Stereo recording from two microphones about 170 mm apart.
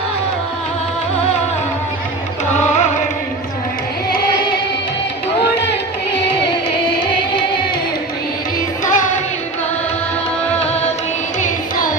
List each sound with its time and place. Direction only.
8.8 s music: 50° left (ahead or behind)
11.3 s carnatic music: 50° left (ahead or behind)